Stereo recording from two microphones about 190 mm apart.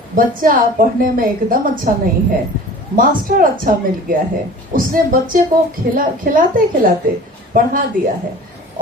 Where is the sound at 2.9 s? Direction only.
45° right (ahead or behind).